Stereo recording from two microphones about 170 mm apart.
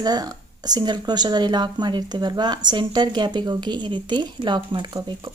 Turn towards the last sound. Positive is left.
turn(degrees=-25)  # may be behind; listen again after turning